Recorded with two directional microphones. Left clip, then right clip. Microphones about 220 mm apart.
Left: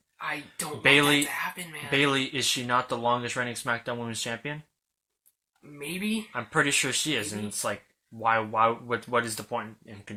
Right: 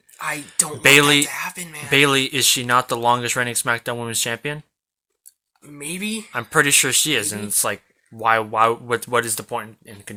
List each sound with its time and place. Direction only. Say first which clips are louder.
0.2 s speech: right 8 dB; 50° right (ahead or behind)
5.7 s speech: right 4 dB; 45° right (ahead or behind)